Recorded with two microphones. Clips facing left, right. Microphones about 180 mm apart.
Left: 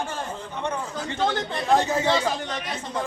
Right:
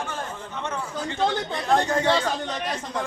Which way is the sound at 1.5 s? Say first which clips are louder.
Left 2 dB; centre (ahead or behind).